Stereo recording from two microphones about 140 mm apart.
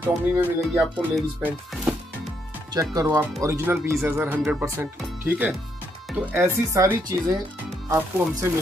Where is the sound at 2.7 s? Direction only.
25° right (ahead or behind).